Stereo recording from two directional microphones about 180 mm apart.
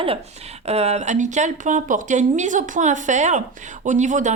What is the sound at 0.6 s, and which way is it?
Speech, 35° right (ahead or behind).